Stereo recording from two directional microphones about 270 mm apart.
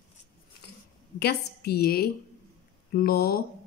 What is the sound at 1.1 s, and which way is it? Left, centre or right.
A woman's voice, left.